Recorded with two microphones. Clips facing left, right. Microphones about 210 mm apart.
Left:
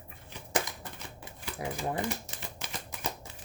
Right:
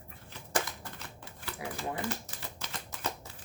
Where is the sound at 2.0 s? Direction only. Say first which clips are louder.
Left 1 dB; 15° left (ahead or behind).